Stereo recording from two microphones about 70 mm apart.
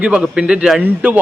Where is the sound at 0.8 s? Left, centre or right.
Right.